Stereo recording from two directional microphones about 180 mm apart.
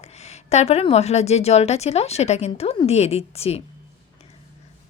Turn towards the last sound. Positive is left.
turn(degrees=35)  # may be behind; listen again after turning